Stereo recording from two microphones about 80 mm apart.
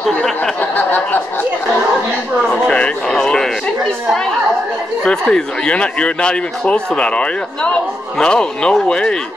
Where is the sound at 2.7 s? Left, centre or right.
Centre.